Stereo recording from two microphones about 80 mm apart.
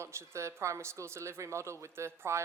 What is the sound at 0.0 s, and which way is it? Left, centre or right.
Speech, right.